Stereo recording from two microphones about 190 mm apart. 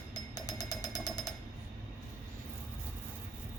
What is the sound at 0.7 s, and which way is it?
Jackhammer, 20° left (ahead or behind).